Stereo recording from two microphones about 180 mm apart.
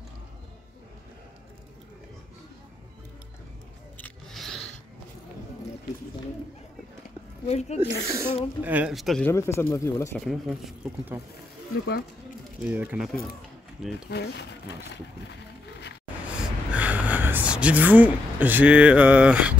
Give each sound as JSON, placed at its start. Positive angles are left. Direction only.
{"t": 4.0, "sound": "scrape", "side_deg": 0}
{"t": 7.4, "sound": "speech", "side_deg": 35}
{"t": 7.9, "sound": "speech", "side_deg": -15}
{"t": 9.3, "sound": "speech", "side_deg": 15}
{"t": 10.1, "sound": "speech", "side_deg": 0}
{"t": 12.6, "sound": "speech", "side_deg": -10}
{"t": 13.9, "sound": "speech", "side_deg": 65}
{"t": 16.3, "sound": "speech", "side_deg": -5}